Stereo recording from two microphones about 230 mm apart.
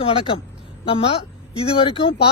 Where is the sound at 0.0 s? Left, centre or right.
Left.